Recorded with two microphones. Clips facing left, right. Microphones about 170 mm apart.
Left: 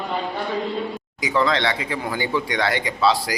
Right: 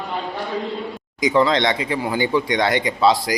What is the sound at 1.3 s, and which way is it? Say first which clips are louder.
Speech: right 3 dB; 20° right (ahead or behind).